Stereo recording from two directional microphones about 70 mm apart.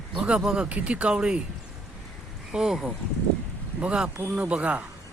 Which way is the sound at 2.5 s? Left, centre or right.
Centre.